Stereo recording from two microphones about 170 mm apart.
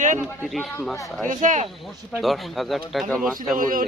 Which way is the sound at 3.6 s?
55° right (ahead or behind).